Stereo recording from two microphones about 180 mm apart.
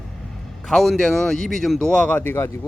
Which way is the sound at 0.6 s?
Centre (ahead or behind).